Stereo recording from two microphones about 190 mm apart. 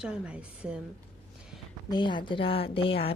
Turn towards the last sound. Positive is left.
turn(degrees=30)  # may be behind; listen again after turning